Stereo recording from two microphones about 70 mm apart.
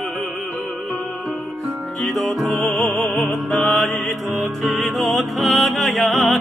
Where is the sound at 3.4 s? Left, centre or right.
Centre.